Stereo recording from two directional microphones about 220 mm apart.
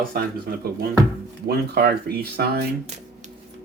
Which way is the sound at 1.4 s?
45° right (ahead or behind).